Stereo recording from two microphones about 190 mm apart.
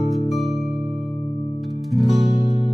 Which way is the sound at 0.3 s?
Centre (ahead or behind).